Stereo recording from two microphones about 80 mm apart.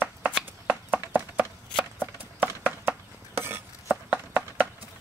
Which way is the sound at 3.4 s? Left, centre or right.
Right.